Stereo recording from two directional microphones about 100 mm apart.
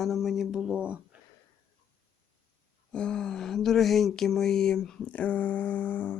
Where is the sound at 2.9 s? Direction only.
10° left (ahead or behind).